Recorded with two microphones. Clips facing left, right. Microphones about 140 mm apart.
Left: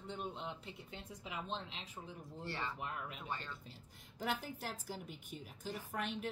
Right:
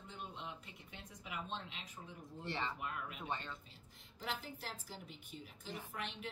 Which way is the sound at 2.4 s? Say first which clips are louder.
Right 2 dB; 20° right (ahead or behind).